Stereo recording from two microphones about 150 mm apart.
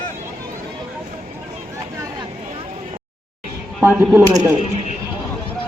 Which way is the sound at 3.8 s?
15° right (ahead or behind).